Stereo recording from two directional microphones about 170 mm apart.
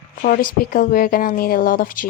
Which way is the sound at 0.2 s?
55° left (ahead or behind).